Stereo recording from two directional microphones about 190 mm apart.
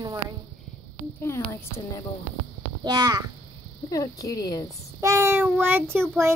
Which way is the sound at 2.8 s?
20° right (ahead or behind).